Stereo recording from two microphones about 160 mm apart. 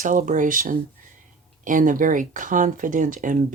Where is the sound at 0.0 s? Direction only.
55° right (ahead or behind).